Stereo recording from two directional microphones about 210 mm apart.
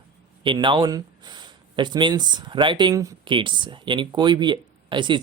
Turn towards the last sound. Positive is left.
turn(degrees=-20)  # may be behind; listen again after turning